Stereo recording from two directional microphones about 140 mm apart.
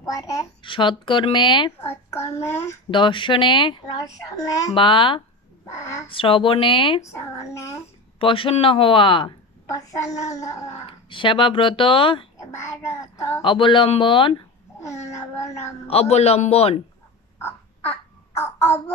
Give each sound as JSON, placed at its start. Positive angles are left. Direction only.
{"t": 0.0, "sound": "a child's voice", "side_deg": 25}
{"t": 0.6, "sound": "speech", "side_deg": 35}
{"t": 1.8, "sound": "a child's voice", "side_deg": 15}
{"t": 2.9, "sound": "speech", "side_deg": 35}
{"t": 5.8, "sound": "a child's voice", "side_deg": 20}
{"t": 6.0, "sound": "speech", "side_deg": 40}
{"t": 7.0, "sound": "a child's voice", "side_deg": 20}
{"t": 8.2, "sound": "speech", "side_deg": 40}
{"t": 9.7, "sound": "a child's voice", "side_deg": 25}
{"t": 10.9, "sound": "speech", "side_deg": 35}
{"t": 12.4, "sound": "a child's voice", "side_deg": 20}
{"t": 13.4, "sound": "speech", "side_deg": 35}
{"t": 15.9, "sound": "a man's voice", "side_deg": 50}
{"t": 17.4, "sound": "babbling", "side_deg": 15}